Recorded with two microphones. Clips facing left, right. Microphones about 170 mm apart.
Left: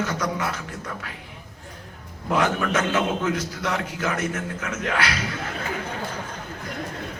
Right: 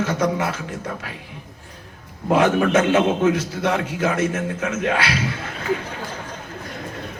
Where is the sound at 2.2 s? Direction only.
25° right (ahead or behind).